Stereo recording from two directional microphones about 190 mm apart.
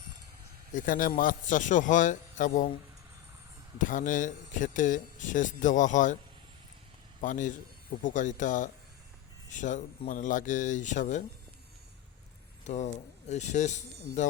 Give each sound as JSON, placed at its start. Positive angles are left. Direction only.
{"t": 0.7, "sound": "a man's voice", "side_deg": 45}
{"t": 3.8, "sound": "speech", "side_deg": 45}
{"t": 7.2, "sound": "speech", "side_deg": 40}
{"t": 12.6, "sound": "speech", "side_deg": 35}